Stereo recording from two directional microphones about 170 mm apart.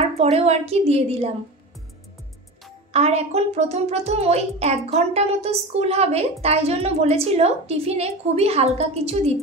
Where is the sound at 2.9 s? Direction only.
40° right (ahead or behind).